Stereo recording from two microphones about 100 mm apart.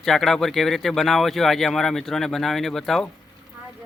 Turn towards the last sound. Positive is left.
turn(degrees=5)  # may be behind; listen again after turning